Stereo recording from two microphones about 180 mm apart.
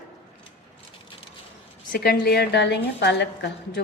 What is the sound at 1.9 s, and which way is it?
A woman's voice, 55° left (ahead or behind).